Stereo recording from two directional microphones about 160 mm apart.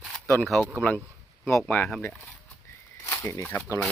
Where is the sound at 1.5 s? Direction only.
5° left (ahead or behind).